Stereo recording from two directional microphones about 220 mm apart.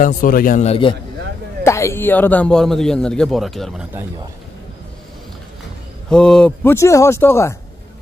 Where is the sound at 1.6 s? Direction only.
15° left (ahead or behind).